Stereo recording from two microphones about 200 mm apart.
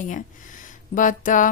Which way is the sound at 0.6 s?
40° left (ahead or behind).